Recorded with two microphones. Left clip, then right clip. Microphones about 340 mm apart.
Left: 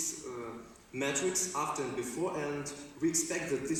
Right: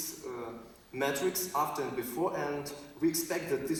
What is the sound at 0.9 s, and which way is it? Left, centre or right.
Speech, right.